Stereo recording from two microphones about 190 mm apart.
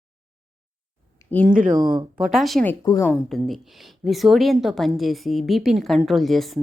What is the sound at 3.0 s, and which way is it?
Speech, centre (ahead or behind).